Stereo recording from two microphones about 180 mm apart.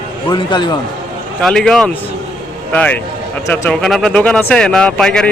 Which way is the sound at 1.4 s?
5° left (ahead or behind).